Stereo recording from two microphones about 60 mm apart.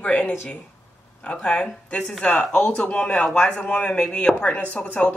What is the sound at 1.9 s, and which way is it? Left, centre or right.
Speech, left.